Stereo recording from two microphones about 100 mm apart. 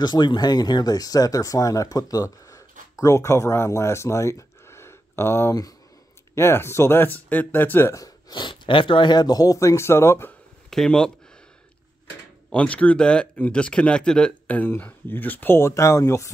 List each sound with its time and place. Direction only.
0.0 s speech: 45° left (ahead or behind); by 7.9 s 20° left (ahead or behind)
8.3 s speech: 55° left (ahead or behind); by 10.3 s 25° left (ahead or behind)
10.7 s speech: 5° left (ahead or behind)
12.4 s speech: 15° left (ahead or behind); by 16.3 s 30° left (ahead or behind)